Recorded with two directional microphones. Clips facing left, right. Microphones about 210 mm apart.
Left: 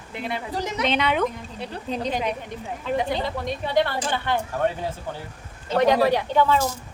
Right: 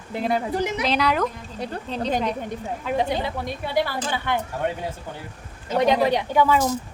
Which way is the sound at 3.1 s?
10° right (ahead or behind).